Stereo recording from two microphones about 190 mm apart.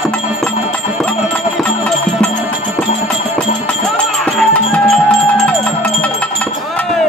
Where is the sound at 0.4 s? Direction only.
5° left (ahead or behind).